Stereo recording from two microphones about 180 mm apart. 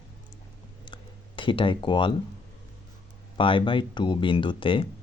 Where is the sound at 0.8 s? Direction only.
25° left (ahead or behind).